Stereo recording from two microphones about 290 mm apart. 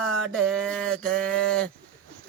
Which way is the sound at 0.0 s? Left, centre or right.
Centre.